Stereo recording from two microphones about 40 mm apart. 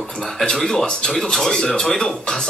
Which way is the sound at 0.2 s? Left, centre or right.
Centre.